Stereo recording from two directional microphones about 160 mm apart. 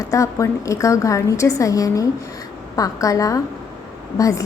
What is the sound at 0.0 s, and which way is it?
A woman's voice, 20° left (ahead or behind).